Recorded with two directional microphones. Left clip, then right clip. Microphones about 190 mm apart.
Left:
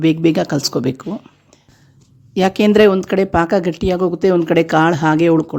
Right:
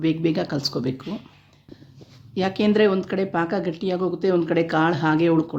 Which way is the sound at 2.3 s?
50° left (ahead or behind).